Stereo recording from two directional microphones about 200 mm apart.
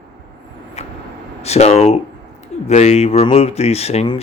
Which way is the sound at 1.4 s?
30° left (ahead or behind).